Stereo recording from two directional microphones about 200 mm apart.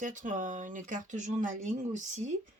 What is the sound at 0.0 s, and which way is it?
Speech, 40° right (ahead or behind).